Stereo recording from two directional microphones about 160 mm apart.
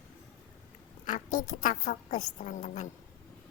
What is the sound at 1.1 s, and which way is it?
A woman's voice, 55° left (ahead or behind).